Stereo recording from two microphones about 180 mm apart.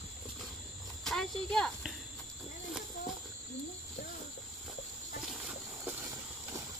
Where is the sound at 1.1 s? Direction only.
5° left (ahead or behind).